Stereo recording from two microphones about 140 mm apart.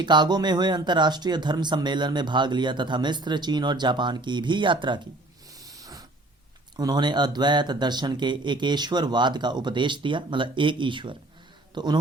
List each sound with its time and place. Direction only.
0.0 s speech: 35° right (ahead or behind)
5.6 s snort: 25° right (ahead or behind)
6.7 s a man's voice: 30° right (ahead or behind)